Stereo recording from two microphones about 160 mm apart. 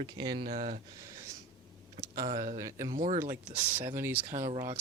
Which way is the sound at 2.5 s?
20° right (ahead or behind).